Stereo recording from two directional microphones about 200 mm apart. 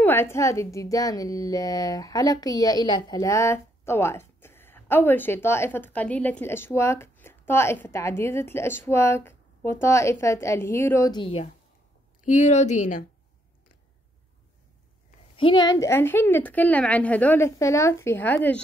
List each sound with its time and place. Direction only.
0.0 s a woman's voice: 10° left (ahead or behind)
12.2 s speech: 35° left (ahead or behind)
15.3 s a woman's voice: 25° left (ahead or behind)